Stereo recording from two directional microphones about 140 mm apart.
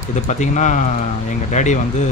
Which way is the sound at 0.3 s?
60° left (ahead or behind).